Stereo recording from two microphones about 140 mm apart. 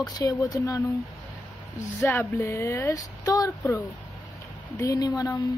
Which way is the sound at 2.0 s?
15° left (ahead or behind).